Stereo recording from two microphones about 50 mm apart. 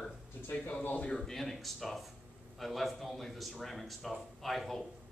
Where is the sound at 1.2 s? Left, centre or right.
Centre.